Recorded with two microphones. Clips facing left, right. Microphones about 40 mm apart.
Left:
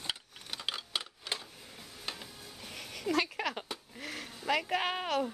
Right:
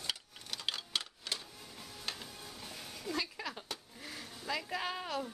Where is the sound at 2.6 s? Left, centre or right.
Left.